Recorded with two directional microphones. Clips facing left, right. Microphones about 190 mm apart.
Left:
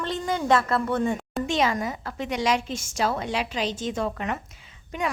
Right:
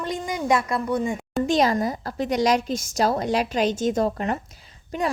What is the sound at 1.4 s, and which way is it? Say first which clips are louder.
A woman's voice: right 5 dB; 35° right (ahead or behind).